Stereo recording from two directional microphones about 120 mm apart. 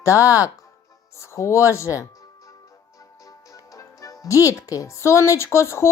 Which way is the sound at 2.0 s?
25° left (ahead or behind).